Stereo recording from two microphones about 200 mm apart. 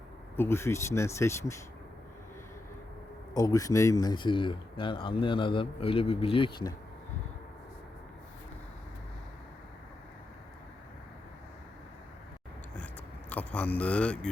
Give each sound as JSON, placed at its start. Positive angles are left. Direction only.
{"t": 0.3, "sound": "speech", "side_deg": 10}
{"t": 3.3, "sound": "speech", "side_deg": 15}
{"t": 13.3, "sound": "speech", "side_deg": 5}